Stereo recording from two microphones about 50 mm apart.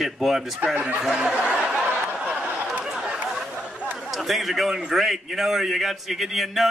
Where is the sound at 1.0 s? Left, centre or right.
Centre.